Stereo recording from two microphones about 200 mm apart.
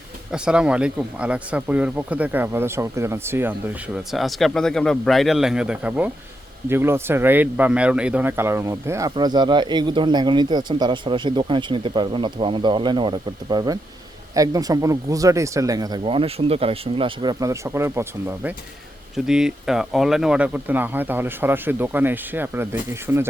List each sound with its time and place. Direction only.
0.3 s speech: 5° right (ahead or behind)
3.9 s speech: centre (ahead or behind)